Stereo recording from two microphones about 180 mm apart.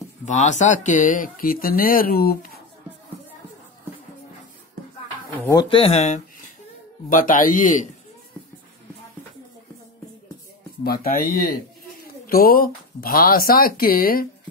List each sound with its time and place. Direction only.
0.2 s speech: 40° left (ahead or behind)
5.5 s speech: 25° left (ahead or behind); by 7.8 s 45° left (ahead or behind)
10.8 s speech: 55° left (ahead or behind)